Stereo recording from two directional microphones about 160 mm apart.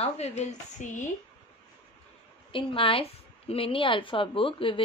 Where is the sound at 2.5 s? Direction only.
35° left (ahead or behind).